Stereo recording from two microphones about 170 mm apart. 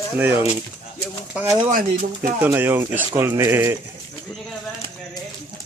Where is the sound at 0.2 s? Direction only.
15° right (ahead or behind).